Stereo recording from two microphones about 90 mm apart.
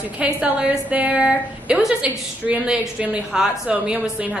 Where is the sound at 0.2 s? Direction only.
15° right (ahead or behind).